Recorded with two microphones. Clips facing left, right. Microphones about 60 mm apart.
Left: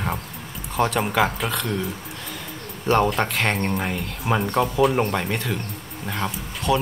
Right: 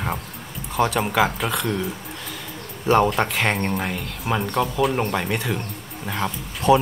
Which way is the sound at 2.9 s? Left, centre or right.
Centre.